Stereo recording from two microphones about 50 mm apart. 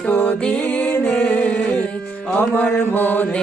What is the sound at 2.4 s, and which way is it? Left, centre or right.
Mantra, left.